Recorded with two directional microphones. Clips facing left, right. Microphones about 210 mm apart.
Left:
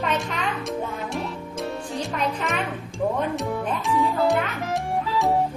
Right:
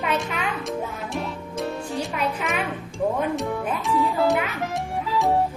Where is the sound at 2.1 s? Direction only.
5° right (ahead or behind).